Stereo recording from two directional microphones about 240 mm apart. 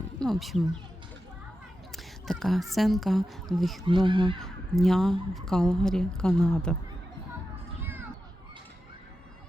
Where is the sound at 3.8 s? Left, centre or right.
Centre.